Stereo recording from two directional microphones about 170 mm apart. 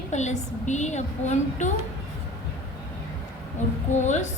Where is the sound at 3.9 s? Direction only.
45° left (ahead or behind).